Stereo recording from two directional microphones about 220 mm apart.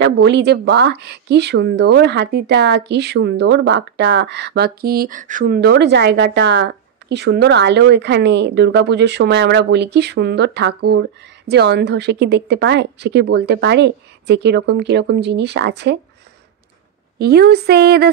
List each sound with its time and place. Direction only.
0.0 s speech: 50° right (ahead or behind)
17.2 s speech: 45° right (ahead or behind)